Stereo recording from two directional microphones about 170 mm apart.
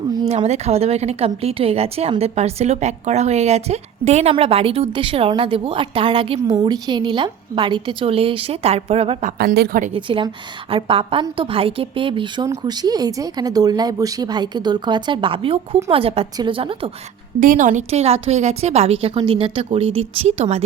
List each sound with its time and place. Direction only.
0.3 s a woman's voice: 40° right (ahead or behind)
9.4 s a woman's voice: 60° right (ahead or behind)
9.9 s a woman's voice: 30° right (ahead or behind)
17.4 s a woman's voice: 50° right (ahead or behind)